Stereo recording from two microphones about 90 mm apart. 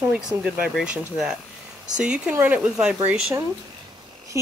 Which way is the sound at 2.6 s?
10° right (ahead or behind).